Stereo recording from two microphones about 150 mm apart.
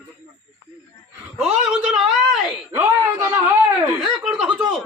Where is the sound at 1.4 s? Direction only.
5° right (ahead or behind).